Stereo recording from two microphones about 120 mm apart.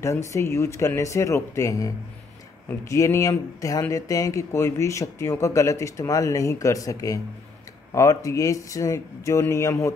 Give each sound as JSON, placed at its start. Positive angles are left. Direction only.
{"t": 0.0, "sound": "speech", "side_deg": 25}